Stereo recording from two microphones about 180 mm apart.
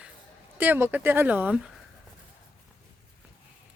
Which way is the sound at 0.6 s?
10° right (ahead or behind).